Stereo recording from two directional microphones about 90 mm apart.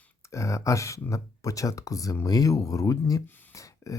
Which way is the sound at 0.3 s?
35° left (ahead or behind).